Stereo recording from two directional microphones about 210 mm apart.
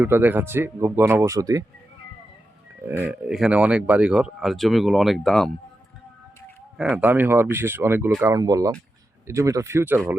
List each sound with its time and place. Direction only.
0.0 s speech: 10° right (ahead or behind)
2.8 s speech: 10° right (ahead or behind)
6.7 s speech: 5° right (ahead or behind)